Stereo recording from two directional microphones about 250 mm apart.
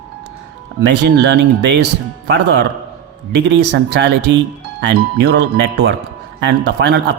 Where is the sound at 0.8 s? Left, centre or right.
Right.